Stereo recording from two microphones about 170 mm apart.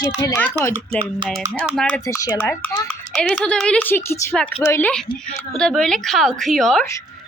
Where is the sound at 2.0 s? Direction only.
20° left (ahead or behind).